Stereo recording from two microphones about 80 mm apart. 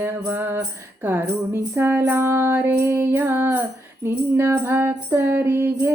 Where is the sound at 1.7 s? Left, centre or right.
Right.